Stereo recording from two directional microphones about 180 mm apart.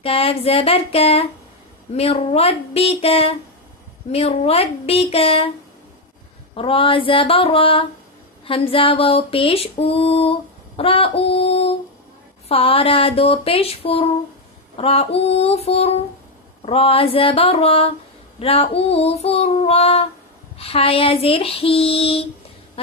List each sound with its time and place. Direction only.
0.0 s mantra: 30° left (ahead or behind)
6.5 s mantra: 30° left (ahead or behind)